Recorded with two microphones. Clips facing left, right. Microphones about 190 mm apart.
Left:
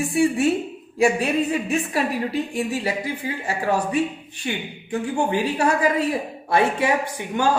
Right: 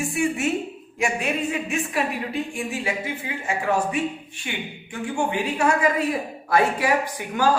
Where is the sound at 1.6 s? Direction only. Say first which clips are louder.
Left 3 dB; 35° left (ahead or behind).